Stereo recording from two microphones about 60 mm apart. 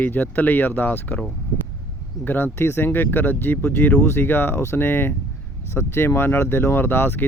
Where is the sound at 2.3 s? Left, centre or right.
Left.